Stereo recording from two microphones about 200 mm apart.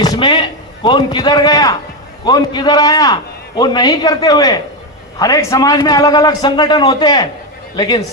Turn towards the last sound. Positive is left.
turn(degrees=20)  # may be behind; listen again after turning